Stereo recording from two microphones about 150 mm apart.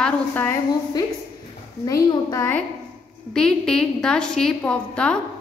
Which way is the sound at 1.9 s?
20° left (ahead or behind).